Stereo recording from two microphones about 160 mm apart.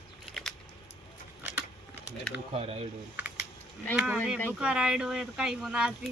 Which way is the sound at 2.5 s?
40° right (ahead or behind).